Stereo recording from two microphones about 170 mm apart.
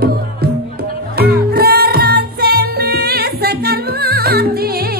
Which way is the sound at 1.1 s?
65° right (ahead or behind).